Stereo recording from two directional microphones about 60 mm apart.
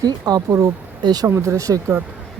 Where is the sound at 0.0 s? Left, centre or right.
Right.